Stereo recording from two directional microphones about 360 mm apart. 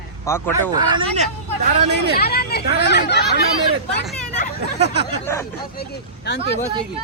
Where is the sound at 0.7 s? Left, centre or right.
Centre.